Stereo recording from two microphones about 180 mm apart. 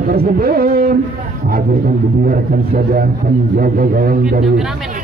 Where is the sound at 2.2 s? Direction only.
55° right (ahead or behind).